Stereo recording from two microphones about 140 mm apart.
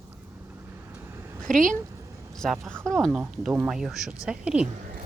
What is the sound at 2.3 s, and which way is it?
Speech, 5° left (ahead or behind).